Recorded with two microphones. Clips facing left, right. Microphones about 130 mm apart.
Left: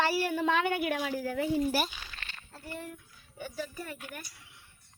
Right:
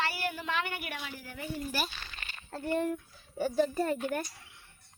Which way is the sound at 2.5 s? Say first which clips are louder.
Right 12 dB; 60° right (ahead or behind).